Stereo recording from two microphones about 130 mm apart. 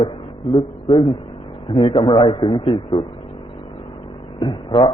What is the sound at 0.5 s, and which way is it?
A man's voice, 40° left (ahead or behind).